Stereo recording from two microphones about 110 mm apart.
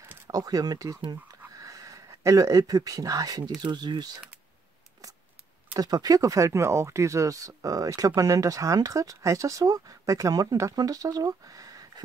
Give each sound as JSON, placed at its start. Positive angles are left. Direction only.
{"t": 0.3, "sound": "speech", "side_deg": -35}
{"t": 5.0, "sound": "scissors", "side_deg": -30}
{"t": 5.8, "sound": "speech", "side_deg": -35}